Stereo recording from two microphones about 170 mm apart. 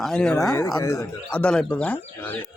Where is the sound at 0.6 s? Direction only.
20° left (ahead or behind).